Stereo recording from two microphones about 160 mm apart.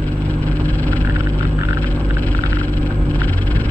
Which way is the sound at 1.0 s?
15° right (ahead or behind).